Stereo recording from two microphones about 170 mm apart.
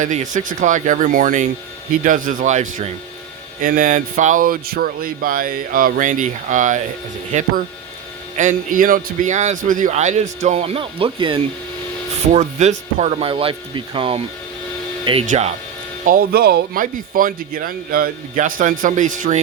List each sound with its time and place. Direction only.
0.0 s a man's voice: 45° right (ahead or behind); by 11.3 s 30° right (ahead or behind)
12.3 s speech: 40° right (ahead or behind)
15.3 s speech: 40° right (ahead or behind)
16.0 s speech: 60° right (ahead or behind)